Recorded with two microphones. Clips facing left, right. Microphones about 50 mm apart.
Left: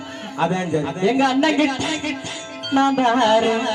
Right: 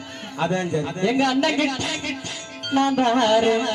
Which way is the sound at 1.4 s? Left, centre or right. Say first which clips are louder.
Left 3 dB; centre.